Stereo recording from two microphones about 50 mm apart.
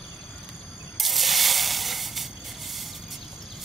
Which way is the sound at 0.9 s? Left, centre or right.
Centre.